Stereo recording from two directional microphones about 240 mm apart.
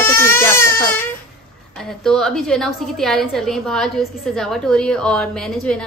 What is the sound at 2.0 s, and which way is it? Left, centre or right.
A woman's voice, centre.